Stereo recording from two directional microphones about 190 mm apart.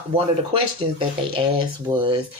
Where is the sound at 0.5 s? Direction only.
30° right (ahead or behind).